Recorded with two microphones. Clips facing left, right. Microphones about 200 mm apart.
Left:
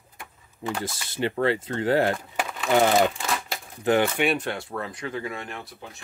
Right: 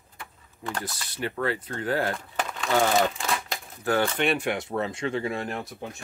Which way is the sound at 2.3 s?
5° left (ahead or behind).